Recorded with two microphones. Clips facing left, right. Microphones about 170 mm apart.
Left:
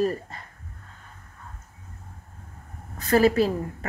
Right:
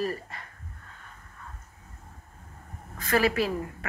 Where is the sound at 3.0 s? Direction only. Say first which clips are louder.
Left 5 dB; 40° left (ahead or behind).